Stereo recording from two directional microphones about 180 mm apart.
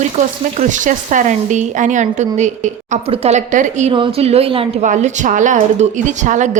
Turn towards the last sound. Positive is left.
turn(degrees=-45)  # may be behind; listen again after turning